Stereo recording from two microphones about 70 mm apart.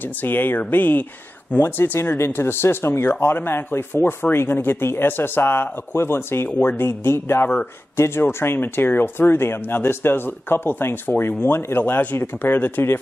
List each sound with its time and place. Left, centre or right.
0.0 s speech: left